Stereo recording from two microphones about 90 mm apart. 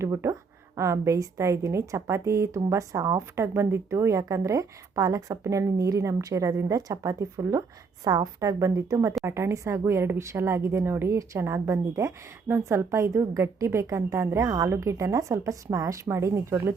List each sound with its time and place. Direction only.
0.0 s a woman's voice: 35° right (ahead or behind)
3.3 s a woman's voice: 30° right (ahead or behind)